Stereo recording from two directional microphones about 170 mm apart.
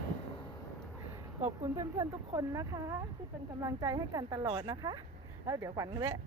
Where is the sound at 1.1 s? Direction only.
15° right (ahead or behind).